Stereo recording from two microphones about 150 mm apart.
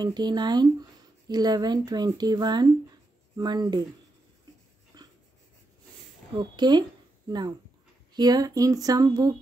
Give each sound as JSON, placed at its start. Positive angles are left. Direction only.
{"t": 0.0, "sound": "speech", "side_deg": -30}
{"t": 4.9, "sound": "a sound", "side_deg": -25}
{"t": 6.3, "sound": "speech", "side_deg": -30}